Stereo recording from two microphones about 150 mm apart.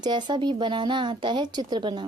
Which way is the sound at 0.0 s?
30° right (ahead or behind).